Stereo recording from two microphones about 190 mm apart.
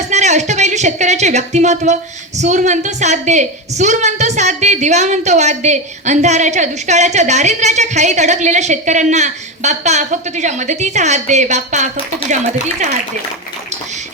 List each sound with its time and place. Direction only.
0.1 s speech: 40° right (ahead or behind)